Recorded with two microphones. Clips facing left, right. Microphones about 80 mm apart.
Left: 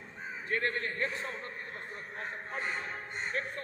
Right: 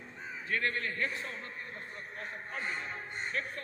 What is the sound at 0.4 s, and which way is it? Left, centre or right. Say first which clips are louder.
A man's voice: left 1 dB; left.